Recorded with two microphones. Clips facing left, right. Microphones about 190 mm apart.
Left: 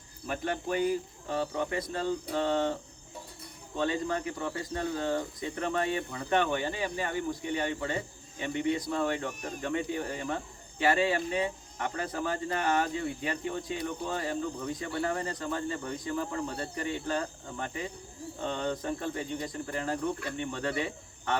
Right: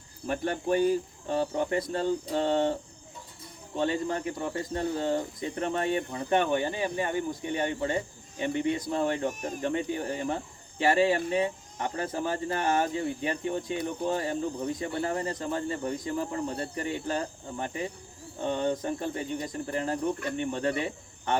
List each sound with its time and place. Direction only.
0.3 s speech: 35° right (ahead or behind)
3.8 s speech: 25° right (ahead or behind)